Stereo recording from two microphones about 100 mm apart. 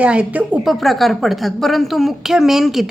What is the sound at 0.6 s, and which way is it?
A woman's voice, centre (ahead or behind).